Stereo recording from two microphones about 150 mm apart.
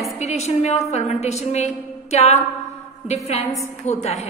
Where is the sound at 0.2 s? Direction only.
45° left (ahead or behind).